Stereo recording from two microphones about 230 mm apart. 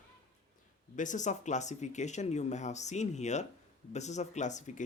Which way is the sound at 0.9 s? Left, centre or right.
Left.